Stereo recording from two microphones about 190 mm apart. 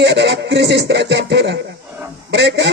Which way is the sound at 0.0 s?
60° right (ahead or behind).